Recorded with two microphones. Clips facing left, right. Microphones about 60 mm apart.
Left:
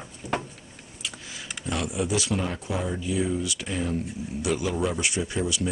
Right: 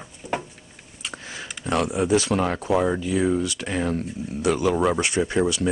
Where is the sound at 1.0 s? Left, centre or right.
Right.